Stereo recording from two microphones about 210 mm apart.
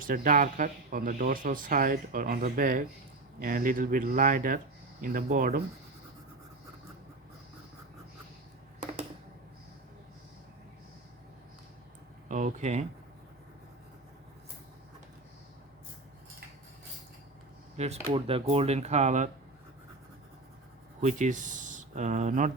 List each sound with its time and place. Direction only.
0.0 s speech: 40° right (ahead or behind)
12.3 s speech: 35° right (ahead or behind)
17.7 s speech: 30° right (ahead or behind)
21.0 s speech: 35° right (ahead or behind)